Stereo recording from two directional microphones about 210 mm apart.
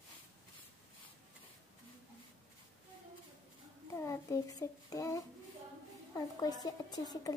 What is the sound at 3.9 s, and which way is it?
A child's voice, 15° left (ahead or behind).